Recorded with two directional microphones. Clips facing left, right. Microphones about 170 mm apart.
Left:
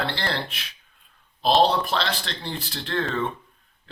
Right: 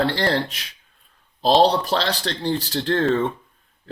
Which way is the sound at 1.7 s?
40° right (ahead or behind).